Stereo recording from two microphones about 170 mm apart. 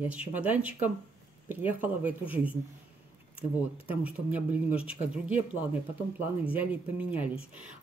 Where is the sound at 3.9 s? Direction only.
10° right (ahead or behind).